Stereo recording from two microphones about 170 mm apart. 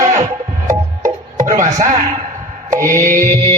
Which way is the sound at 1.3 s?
50° right (ahead or behind).